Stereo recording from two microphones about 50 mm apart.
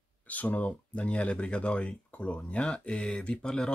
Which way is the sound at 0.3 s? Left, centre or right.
Left.